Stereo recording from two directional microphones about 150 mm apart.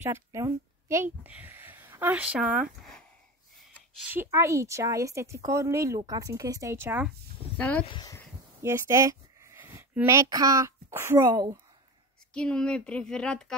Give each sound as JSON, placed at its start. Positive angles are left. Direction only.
{"t": 0.0, "sound": "speech", "side_deg": -20}
{"t": 4.1, "sound": "speech", "side_deg": -15}
{"t": 7.5, "sound": "speech", "side_deg": 10}
{"t": 7.8, "sound": "speech", "side_deg": 35}
{"t": 8.6, "sound": "speech", "side_deg": -20}
{"t": 12.4, "sound": "speech", "side_deg": 5}